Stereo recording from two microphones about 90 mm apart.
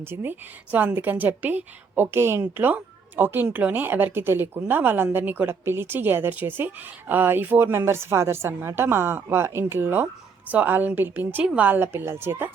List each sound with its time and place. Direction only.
0.0 s a woman's voice: 25° right (ahead or behind)